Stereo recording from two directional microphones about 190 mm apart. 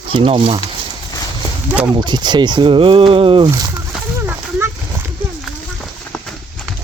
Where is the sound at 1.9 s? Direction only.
25° right (ahead or behind).